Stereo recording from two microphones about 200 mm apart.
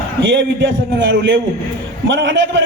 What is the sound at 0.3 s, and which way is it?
A man's voice, 65° right (ahead or behind).